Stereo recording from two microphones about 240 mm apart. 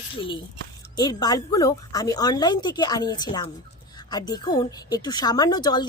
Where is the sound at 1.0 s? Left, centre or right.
Centre.